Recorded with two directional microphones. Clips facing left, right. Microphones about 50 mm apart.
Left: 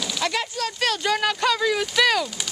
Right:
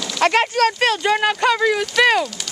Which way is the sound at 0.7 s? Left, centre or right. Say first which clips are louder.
Right 5 dB; right.